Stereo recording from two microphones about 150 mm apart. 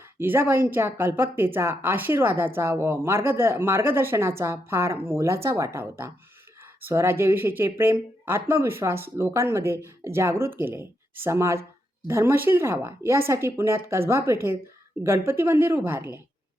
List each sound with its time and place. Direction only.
0.2 s a woman's voice: 15° right (ahead or behind)